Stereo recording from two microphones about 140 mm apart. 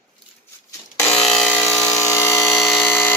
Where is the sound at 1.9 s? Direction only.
20° left (ahead or behind).